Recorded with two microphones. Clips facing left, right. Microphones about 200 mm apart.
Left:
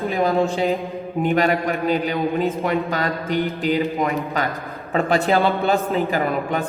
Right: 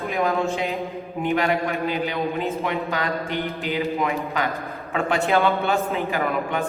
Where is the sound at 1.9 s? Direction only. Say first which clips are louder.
Left 4 dB; 40° left (ahead or behind).